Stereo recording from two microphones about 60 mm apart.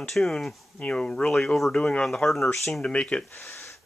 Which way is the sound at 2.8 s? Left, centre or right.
Centre.